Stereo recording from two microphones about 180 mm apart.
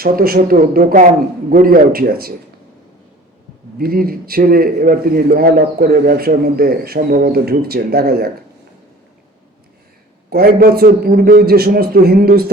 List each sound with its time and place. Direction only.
0.0 s a man's voice: 55° right (ahead or behind)
3.8 s a man's voice: 55° right (ahead or behind)
10.2 s a man's voice: 55° right (ahead or behind)